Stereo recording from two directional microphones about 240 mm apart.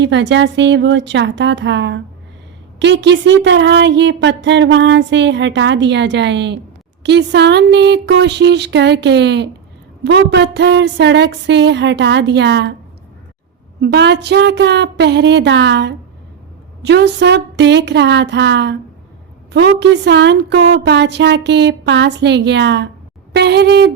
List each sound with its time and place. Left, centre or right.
0.0 s speech: right
13.8 s speech: right